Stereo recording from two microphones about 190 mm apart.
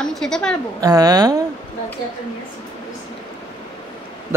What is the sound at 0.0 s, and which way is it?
Speech, 5° left (ahead or behind).